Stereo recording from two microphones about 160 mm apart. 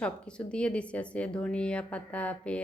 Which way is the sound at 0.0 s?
5° left (ahead or behind).